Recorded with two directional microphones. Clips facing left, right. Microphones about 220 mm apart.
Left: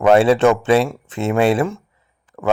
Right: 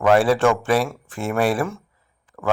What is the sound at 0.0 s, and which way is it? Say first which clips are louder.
Speech: left 4 dB; 25° left (ahead or behind).